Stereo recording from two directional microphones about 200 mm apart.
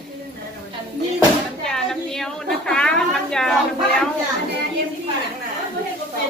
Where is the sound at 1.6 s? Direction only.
Centre (ahead or behind).